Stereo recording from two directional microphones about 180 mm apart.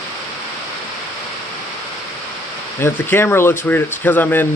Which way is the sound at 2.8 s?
15° left (ahead or behind).